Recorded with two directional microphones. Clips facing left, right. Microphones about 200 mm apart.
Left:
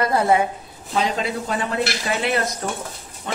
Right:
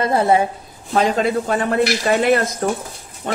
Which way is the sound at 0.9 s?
50° right (ahead or behind).